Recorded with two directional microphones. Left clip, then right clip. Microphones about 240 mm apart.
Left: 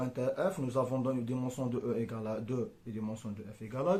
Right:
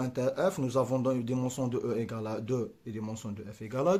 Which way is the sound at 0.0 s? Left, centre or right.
Right.